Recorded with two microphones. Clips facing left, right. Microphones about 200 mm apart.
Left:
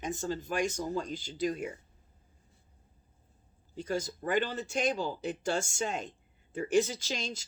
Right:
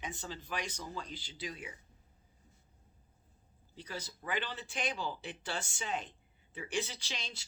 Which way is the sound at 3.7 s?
45° left (ahead or behind).